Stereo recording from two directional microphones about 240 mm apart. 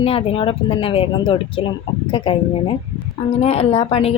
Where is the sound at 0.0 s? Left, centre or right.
Left.